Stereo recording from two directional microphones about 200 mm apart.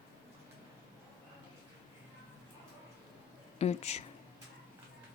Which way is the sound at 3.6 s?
35° left (ahead or behind).